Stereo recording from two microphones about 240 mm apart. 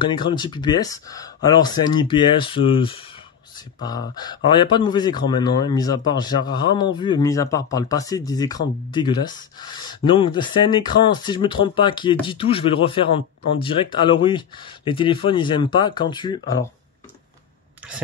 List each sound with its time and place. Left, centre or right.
0.0 s speech: centre